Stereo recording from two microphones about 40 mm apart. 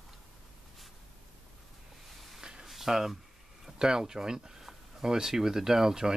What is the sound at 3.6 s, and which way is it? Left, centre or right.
Speech, centre.